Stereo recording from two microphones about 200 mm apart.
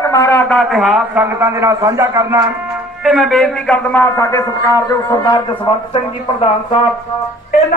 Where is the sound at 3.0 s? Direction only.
Centre (ahead or behind); by 6.8 s 25° left (ahead or behind).